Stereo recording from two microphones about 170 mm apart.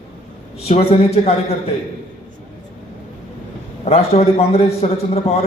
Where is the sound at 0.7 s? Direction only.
40° left (ahead or behind).